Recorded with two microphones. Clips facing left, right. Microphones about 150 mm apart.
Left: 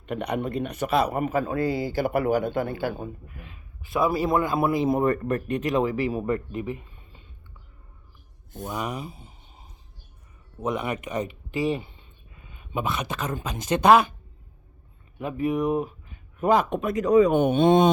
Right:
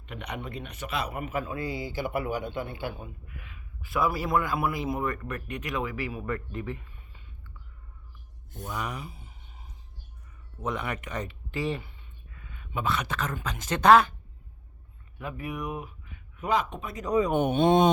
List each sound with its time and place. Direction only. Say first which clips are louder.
0.0 s speech: left 10 dB; 40° left (ahead or behind)
3.8 s speech: left 5 dB; 20° left (ahead or behind)
8.5 s speech: left 4 dB; 20° left (ahead or behind)
10.6 s speech: left 5 dB; 15° left (ahead or behind)
15.2 s speech: left 10 dB; 25° left (ahead or behind)
16.6 s speech: left 10 dB; 85° left